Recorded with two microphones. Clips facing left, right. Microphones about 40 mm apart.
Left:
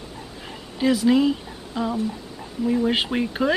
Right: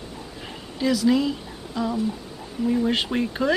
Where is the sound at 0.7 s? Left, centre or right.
Left.